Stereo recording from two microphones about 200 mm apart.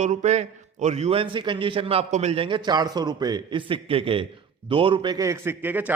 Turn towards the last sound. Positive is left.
turn(degrees=-10)  # may be behind; listen again after turning